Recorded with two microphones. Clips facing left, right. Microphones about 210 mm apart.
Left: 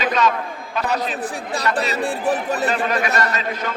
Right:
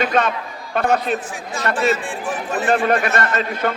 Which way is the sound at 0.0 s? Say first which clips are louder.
Right 1 dB; 55° right (ahead or behind).